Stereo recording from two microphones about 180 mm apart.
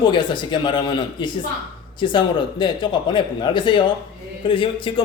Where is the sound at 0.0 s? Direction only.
25° left (ahead or behind).